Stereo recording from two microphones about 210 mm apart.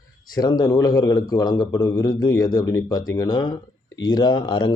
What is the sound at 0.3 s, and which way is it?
A man's voice, 20° left (ahead or behind).